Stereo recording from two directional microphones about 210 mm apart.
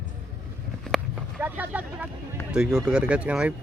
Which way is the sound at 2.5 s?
5° right (ahead or behind).